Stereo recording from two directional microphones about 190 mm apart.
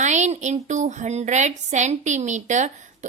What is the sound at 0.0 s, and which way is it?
A woman's voice, 40° right (ahead or behind).